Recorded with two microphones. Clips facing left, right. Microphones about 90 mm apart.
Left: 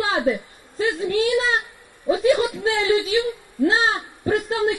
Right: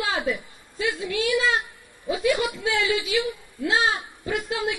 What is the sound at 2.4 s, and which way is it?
Speech, 45° left (ahead or behind).